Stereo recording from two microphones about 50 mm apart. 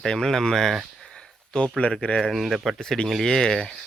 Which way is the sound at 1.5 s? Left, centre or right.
Left.